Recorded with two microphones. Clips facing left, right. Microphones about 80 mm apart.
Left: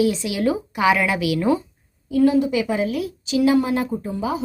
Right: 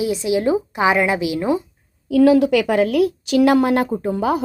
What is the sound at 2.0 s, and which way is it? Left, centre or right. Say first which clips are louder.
A woman's voice: right 4 dB; right.